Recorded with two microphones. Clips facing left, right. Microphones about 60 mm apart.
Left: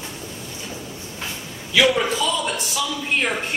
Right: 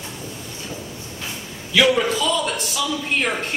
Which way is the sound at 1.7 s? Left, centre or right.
Centre.